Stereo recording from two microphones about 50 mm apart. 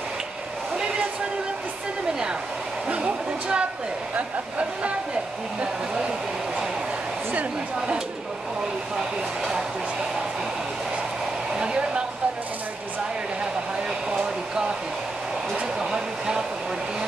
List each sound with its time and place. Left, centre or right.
2.9 s speech: right
7.3 s speech: right
11.5 s hair dryer: centre
14.1 s hair dryer: centre
15.8 s a sound: centre